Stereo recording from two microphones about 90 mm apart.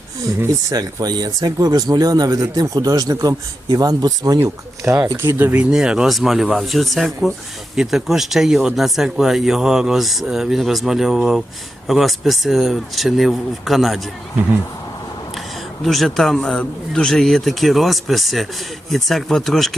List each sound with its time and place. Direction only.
0.7 s speech: 45° right (ahead or behind)
4.4 s speech: 35° right (ahead or behind)
5.4 s speech: 20° right (ahead or behind)
5.7 s speech: 10° right (ahead or behind)
15.8 s speech: centre (ahead or behind)